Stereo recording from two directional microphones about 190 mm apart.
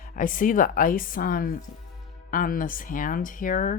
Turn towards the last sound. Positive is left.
turn(degrees=45)  # may be behind; listen again after turning